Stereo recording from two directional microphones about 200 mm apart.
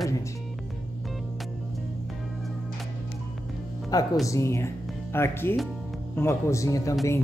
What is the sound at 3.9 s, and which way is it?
Speech, 20° left (ahead or behind).